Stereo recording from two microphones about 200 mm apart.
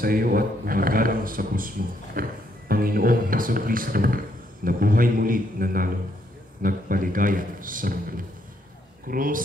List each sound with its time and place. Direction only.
0.0 s speech: 45° right (ahead or behind)
9.1 s speech: 45° right (ahead or behind)